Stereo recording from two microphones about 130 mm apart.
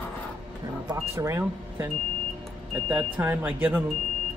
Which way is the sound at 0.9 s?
20° right (ahead or behind).